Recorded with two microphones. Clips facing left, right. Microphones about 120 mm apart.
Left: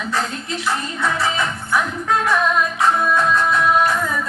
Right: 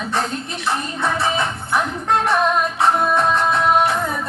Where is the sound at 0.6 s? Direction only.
25° right (ahead or behind).